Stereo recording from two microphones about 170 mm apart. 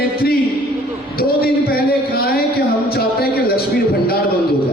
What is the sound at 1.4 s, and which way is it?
Speech, 60° left (ahead or behind).